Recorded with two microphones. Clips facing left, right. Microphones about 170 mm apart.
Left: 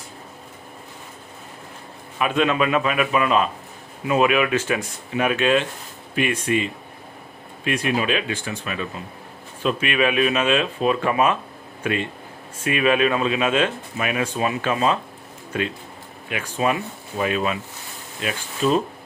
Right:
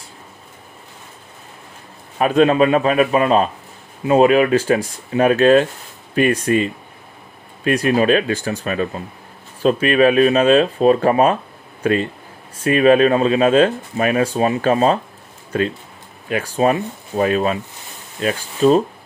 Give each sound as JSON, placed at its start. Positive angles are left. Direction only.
{"t": 2.1, "sound": "speech", "side_deg": -40}
{"t": 16.3, "sound": "speech", "side_deg": -40}